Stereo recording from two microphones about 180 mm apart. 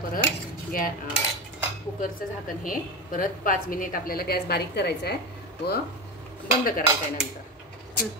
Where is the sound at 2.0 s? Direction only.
50° left (ahead or behind).